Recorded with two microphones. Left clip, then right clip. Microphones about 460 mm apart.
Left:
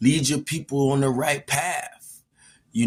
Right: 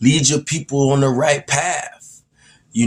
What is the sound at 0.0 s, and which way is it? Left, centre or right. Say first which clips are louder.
Speech: right 6 dB; left.